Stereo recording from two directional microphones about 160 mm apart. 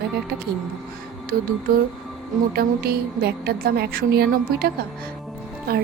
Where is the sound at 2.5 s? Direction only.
75° right (ahead or behind).